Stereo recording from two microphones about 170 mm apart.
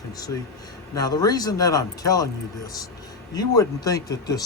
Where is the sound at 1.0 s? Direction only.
20° left (ahead or behind).